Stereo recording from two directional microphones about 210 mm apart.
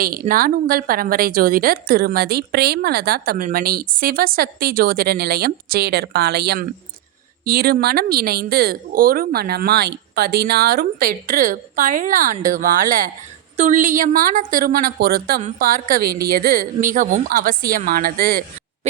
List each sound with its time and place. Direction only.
0.0 s a woman's voice: 45° right (ahead or behind)
15.4 s a woman's voice: 35° right (ahead or behind)